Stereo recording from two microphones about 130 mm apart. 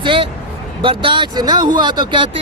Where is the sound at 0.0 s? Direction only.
40° right (ahead or behind).